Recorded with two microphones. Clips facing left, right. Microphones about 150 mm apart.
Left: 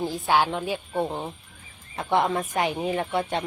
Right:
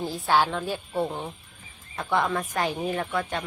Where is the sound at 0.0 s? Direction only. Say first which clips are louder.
Left 1 dB; 15° left (ahead or behind).